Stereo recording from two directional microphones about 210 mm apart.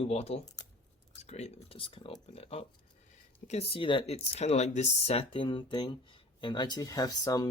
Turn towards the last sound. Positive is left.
turn(degrees=15)  # may be behind; listen again after turning